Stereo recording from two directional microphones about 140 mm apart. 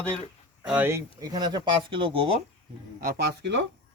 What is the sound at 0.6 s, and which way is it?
Speech, 10° right (ahead or behind).